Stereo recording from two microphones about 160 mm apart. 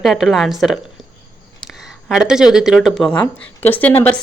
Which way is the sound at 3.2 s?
10° left (ahead or behind).